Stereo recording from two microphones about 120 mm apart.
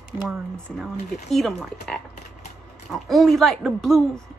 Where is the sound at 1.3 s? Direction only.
Centre (ahead or behind).